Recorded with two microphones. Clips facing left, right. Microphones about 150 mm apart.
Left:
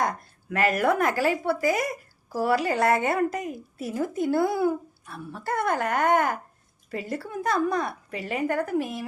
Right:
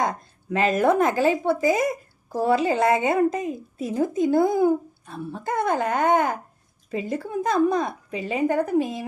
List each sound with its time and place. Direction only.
0.0 s speech: 20° right (ahead or behind)